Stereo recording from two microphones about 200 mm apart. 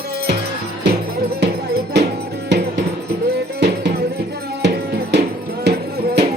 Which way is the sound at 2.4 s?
60° right (ahead or behind).